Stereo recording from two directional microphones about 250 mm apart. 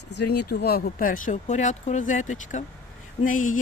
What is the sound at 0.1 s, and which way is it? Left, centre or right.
Speech, left.